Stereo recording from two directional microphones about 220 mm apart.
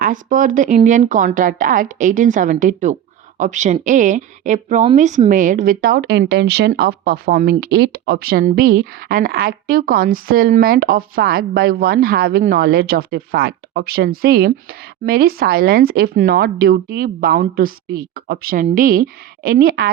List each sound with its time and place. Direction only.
0.0 s a woman's voice: 35° right (ahead or behind)